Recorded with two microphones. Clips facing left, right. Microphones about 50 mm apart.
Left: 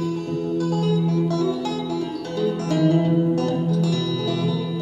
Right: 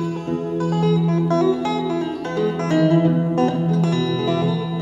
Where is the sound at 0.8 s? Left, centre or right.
Right.